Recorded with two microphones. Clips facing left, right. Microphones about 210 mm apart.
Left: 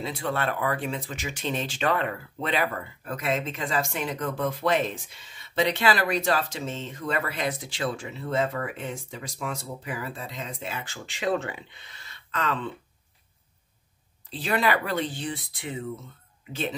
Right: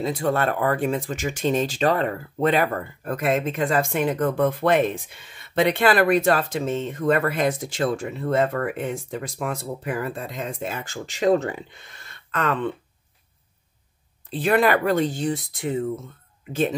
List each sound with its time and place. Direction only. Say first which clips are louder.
0.0 s speech: right 6 dB; 45° right (ahead or behind)
14.3 s speech: right 6 dB; 55° right (ahead or behind)